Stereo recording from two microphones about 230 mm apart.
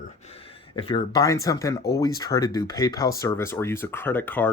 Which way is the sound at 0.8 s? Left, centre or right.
Left.